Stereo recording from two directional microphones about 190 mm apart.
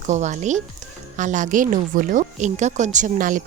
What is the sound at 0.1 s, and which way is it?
A woman's voice, 40° right (ahead or behind).